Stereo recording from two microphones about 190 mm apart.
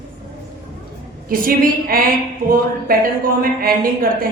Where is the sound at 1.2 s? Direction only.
50° right (ahead or behind).